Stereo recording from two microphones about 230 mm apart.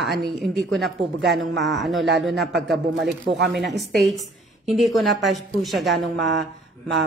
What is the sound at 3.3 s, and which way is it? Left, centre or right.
Speech, right.